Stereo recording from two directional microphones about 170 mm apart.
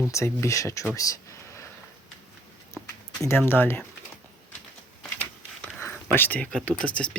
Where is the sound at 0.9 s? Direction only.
20° left (ahead or behind).